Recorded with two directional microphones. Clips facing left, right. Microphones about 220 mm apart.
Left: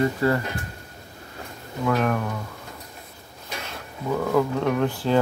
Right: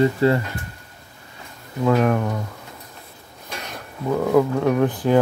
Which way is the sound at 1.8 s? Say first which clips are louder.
Right 5 dB; 25° right (ahead or behind).